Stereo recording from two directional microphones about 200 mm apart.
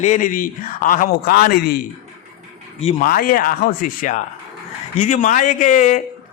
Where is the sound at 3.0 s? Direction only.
45° left (ahead or behind).